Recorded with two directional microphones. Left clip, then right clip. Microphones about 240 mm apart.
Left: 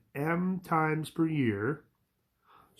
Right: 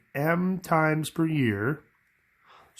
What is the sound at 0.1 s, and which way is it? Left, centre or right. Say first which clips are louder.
Speech: right 6 dB; right.